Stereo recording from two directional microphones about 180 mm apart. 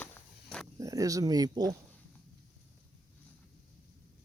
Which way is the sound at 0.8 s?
20° right (ahead or behind).